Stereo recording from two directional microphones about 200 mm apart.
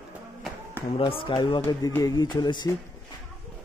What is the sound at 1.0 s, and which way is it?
A man's voice, 25° left (ahead or behind).